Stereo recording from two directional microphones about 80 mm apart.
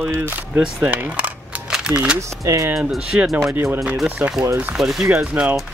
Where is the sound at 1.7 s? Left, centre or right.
Centre.